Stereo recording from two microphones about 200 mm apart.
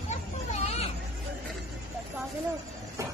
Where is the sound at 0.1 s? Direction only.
30° left (ahead or behind).